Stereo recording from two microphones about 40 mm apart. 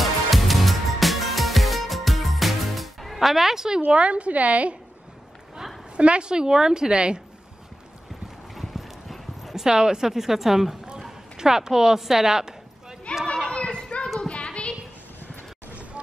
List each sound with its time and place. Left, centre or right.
0.0 s music: centre
3.8 s a woman's voice: right
5.9 s a woman's voice: right
8.5 s clip-clop: centre
9.6 s a woman's voice: centre
13.3 s children playing: left
14.2 s a sound: left
15.1 s vehicle: left
15.7 s vehicle: right